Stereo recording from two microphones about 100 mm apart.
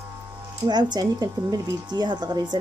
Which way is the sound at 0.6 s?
45° right (ahead or behind).